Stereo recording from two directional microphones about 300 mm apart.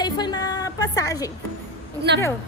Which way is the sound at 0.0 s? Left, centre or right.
Centre.